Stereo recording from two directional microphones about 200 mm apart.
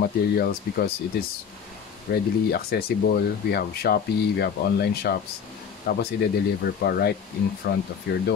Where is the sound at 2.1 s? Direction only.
50° left (ahead or behind).